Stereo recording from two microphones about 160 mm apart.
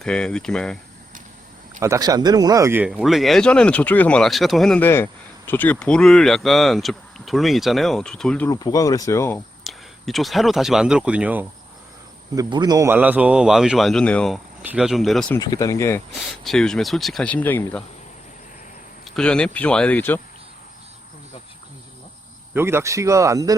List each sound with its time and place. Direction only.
0.0 s speech: 5° left (ahead or behind)
1.8 s speech: 20° right (ahead or behind)
2.9 s speech: centre (ahead or behind)
8.4 s speech: 25° left (ahead or behind)
9.6 s speech: centre (ahead or behind)
12.3 s speech: 25° right (ahead or behind); by 14.4 s 5° left (ahead or behind)
14.6 s speech: 5° right (ahead or behind)
15.4 s speech: 20° left (ahead or behind)
16.1 s speech: centre (ahead or behind)
19.0 s speech: 5° left (ahead or behind)
22.5 s speech: 15° right (ahead or behind)